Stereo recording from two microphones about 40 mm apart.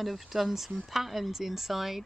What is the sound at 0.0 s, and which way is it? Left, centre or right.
Speech, centre.